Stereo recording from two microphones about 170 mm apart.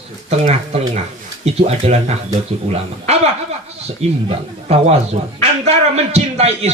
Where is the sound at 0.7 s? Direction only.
35° right (ahead or behind).